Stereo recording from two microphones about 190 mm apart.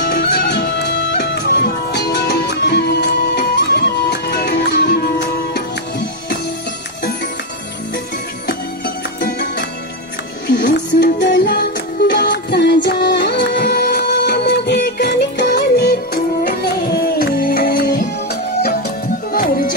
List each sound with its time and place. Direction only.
0.1 s music: 55° left (ahead or behind)
9.2 s music: 60° left (ahead or behind)
10.7 s music: 60° left (ahead or behind)
19.3 s music: 45° left (ahead or behind)